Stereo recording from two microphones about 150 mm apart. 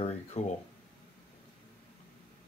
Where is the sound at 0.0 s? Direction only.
45° left (ahead or behind).